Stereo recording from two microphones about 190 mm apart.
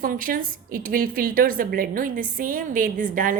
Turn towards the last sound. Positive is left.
turn(degrees=-45)  # may be behind; listen again after turning